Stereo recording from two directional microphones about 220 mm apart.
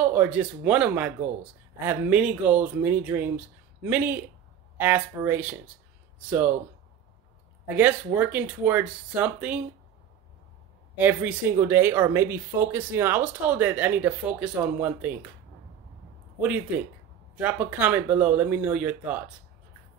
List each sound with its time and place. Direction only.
0.0 s speech: 5° right (ahead or behind)
7.6 s speech: 10° right (ahead or behind)
11.0 s speech: 10° right (ahead or behind)
16.3 s speech: 5° right (ahead or behind)